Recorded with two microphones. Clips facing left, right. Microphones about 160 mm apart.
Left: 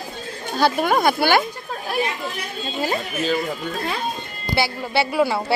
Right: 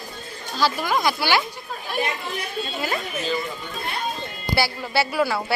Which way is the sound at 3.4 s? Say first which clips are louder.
Left 5 dB; 70° left (ahead or behind).